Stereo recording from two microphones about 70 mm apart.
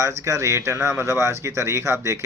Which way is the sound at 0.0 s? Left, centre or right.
Right.